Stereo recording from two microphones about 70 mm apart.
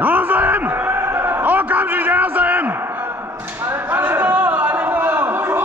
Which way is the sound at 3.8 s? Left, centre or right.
Right.